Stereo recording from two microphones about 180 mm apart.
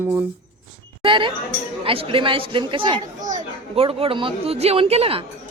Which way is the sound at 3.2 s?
45° right (ahead or behind).